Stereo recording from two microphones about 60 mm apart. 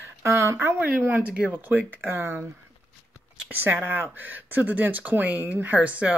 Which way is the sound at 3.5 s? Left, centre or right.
Right.